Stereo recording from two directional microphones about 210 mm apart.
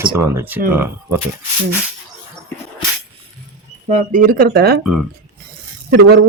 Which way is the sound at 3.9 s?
40° right (ahead or behind).